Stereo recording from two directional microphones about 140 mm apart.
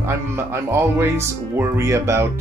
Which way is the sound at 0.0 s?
20° right (ahead or behind).